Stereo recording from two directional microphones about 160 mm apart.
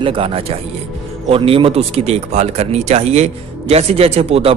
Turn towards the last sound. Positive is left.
turn(degrees=-40)  # may be behind; listen again after turning